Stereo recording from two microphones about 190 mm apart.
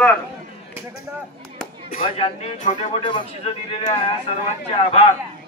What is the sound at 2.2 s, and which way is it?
Speech, 35° left (ahead or behind).